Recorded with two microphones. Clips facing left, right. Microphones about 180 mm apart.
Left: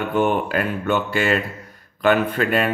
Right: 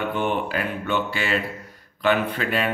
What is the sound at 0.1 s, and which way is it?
Speech, 45° left (ahead or behind).